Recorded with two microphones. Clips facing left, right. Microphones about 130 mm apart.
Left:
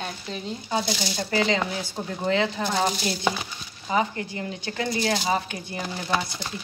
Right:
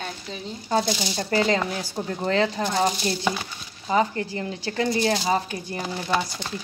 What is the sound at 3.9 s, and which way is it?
Speech, 35° right (ahead or behind).